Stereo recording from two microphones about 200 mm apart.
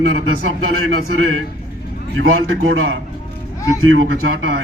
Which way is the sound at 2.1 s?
90° right.